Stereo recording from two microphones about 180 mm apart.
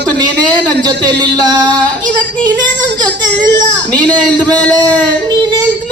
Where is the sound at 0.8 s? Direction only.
25° right (ahead or behind).